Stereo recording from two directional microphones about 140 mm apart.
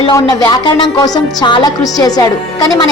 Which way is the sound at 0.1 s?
25° left (ahead or behind).